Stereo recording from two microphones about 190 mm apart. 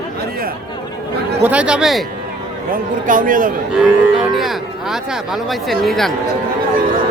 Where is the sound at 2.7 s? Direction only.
45° right (ahead or behind).